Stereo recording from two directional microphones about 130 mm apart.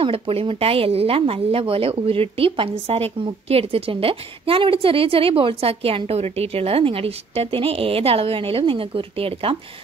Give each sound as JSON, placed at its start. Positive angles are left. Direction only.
{"t": 0.0, "sound": "a woman's voice", "side_deg": -45}